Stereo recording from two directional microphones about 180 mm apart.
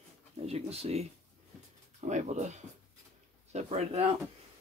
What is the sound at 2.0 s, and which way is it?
Speech, 40° right (ahead or behind).